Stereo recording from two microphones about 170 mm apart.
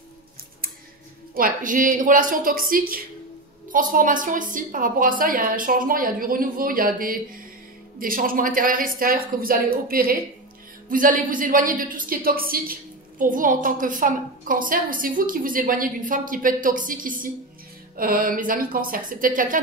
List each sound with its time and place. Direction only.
1.3 s a woman's voice: 55° right (ahead or behind)